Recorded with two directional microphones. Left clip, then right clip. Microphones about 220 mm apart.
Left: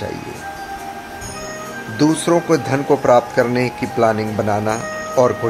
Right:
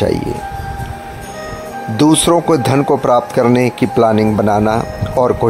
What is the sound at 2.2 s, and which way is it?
A man's voice, 40° right (ahead or behind).